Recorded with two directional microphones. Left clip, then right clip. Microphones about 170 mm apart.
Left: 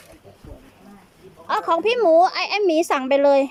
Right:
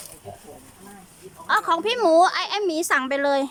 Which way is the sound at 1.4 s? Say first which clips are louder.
Left 1 dB; 5° left (ahead or behind).